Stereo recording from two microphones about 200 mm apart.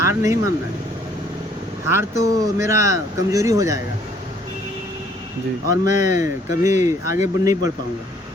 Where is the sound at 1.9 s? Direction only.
15° right (ahead or behind).